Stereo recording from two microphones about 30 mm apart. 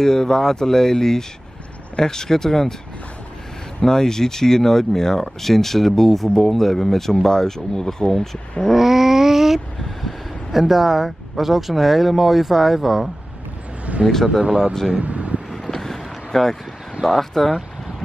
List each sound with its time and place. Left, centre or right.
0.0 s speech: centre
3.8 s speech: centre
8.7 s dog: centre
9.8 s vehicle: centre
10.5 s speech: centre
13.9 s vehicle: right
15.5 s vehicle: centre
17.0 s speech: centre